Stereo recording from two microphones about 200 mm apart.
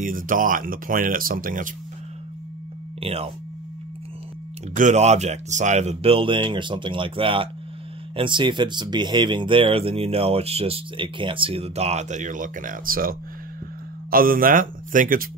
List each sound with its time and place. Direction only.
0.0 s speech: 40° right (ahead or behind)
3.0 s speech: 30° right (ahead or behind)
4.7 s speech: 35° right (ahead or behind)
14.1 s speech: 45° right (ahead or behind)